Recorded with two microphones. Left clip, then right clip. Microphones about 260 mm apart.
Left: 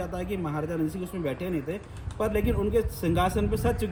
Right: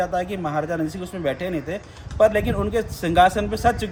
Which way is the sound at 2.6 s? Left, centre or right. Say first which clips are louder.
Right 3 dB; right.